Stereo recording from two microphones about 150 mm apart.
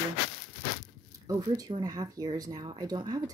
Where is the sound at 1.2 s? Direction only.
25° right (ahead or behind).